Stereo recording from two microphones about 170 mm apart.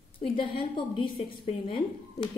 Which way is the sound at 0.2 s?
30° left (ahead or behind).